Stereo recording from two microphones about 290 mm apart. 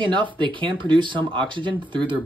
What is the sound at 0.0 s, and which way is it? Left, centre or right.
Speech, centre.